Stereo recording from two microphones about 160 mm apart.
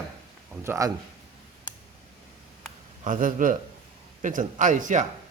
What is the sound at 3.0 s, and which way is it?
A man's voice, 60° right (ahead or behind).